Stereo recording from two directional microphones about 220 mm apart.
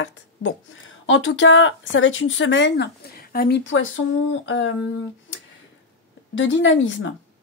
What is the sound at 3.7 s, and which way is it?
Speech, 60° left (ahead or behind).